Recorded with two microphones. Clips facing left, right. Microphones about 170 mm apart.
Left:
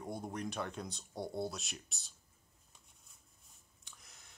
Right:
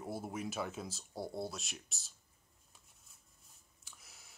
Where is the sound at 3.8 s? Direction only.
5° right (ahead or behind).